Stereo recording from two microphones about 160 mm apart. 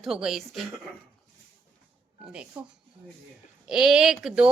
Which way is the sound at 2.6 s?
10° right (ahead or behind).